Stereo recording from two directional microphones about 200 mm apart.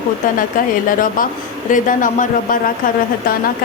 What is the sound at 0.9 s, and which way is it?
Speech, 45° left (ahead or behind).